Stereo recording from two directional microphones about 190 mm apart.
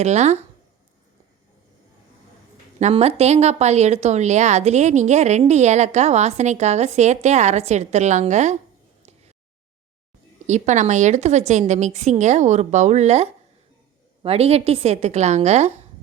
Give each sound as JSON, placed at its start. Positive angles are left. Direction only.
{"t": 0.0, "sound": "a woman's voice", "side_deg": -35}
{"t": 2.7, "sound": "a woman's voice", "side_deg": -35}
{"t": 10.4, "sound": "a woman's voice", "side_deg": -40}